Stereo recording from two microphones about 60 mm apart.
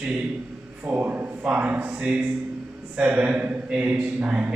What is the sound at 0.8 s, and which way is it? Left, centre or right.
Speech, right.